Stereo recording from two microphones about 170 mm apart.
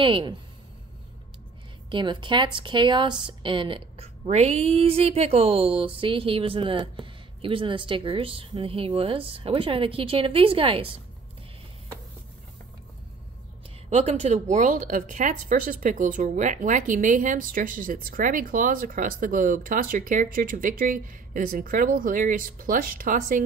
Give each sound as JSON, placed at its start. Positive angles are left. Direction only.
{"t": 0.0, "sound": "speech", "side_deg": -30}
{"t": 1.9, "sound": "a woman's voice", "side_deg": -30}
{"t": 13.8, "sound": "speech", "side_deg": -40}